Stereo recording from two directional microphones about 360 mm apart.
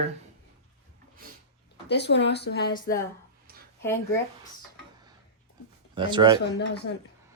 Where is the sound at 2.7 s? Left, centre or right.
Centre.